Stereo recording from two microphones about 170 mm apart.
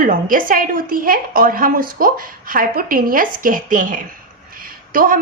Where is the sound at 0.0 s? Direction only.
55° right (ahead or behind).